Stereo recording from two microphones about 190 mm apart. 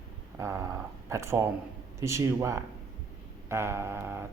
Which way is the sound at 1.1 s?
15° right (ahead or behind).